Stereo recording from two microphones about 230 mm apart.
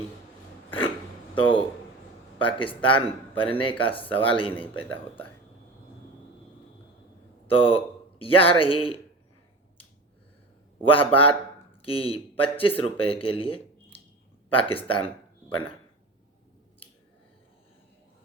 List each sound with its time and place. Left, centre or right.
1.4 s speech: left
7.4 s a man's voice: left
10.8 s speech: left
14.8 s a sound: left